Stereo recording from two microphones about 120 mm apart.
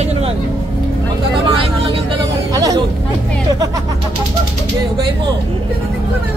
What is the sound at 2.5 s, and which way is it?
Speech, 30° right (ahead or behind).